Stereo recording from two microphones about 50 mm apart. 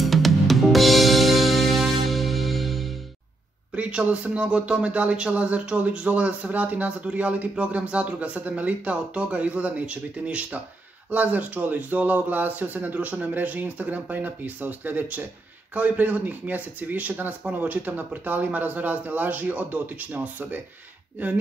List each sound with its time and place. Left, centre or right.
0.0 s music: centre
3.7 s speech: right